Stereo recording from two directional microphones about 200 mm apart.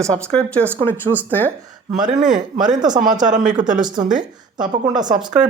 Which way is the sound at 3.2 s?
40° right (ahead or behind).